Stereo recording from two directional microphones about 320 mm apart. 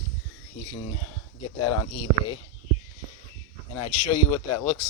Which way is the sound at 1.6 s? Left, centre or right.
Left.